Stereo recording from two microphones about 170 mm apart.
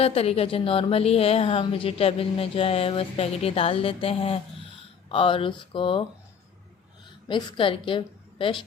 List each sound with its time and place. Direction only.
0.0 s a woman's voice: 35° left (ahead or behind)
7.3 s a woman's voice: 30° left (ahead or behind)